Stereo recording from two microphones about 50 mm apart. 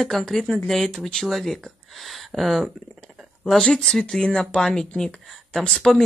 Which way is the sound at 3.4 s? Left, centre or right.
Centre.